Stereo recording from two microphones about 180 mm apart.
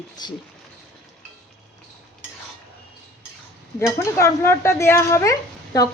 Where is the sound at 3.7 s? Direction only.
15° left (ahead or behind).